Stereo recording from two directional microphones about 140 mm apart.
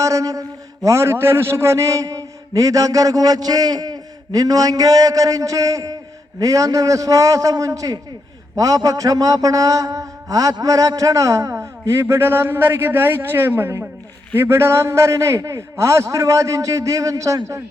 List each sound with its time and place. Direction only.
0.0 s a man's voice: 25° right (ahead or behind)